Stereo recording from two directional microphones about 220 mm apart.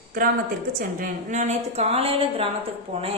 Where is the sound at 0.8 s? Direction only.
40° right (ahead or behind).